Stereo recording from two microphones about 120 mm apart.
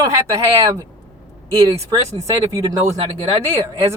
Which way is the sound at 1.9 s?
30° right (ahead or behind).